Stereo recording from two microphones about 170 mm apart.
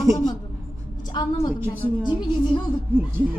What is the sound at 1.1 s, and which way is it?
Speech, 25° left (ahead or behind).